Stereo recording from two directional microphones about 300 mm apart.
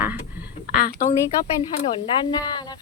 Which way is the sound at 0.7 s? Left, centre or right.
Left.